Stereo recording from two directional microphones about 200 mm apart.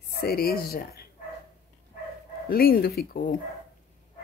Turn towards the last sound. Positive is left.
turn(degrees=45)  # may be behind; listen again after turning